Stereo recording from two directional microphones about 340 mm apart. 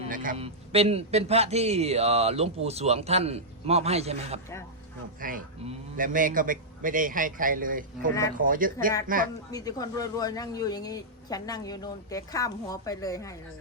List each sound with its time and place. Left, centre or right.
0.0 s a man's voice: right
9.5 s speech: centre